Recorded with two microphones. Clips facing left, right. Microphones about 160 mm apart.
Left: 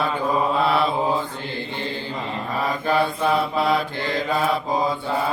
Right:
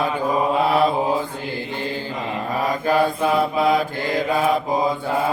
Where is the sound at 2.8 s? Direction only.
45° right (ahead or behind).